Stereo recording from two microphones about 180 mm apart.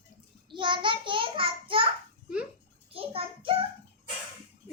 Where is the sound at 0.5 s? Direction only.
25° right (ahead or behind).